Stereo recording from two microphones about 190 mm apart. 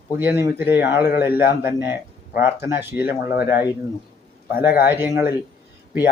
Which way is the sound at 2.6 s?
10° right (ahead or behind).